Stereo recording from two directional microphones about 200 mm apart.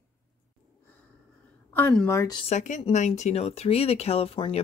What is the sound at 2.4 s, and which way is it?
Speech, 35° left (ahead or behind).